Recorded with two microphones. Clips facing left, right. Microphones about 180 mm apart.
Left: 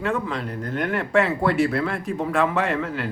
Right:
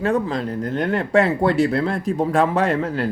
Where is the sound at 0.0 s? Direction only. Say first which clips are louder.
Right 5 dB; 35° right (ahead or behind).